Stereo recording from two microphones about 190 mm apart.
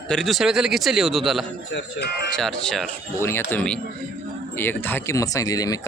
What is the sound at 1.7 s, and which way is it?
Speech, 65° left (ahead or behind).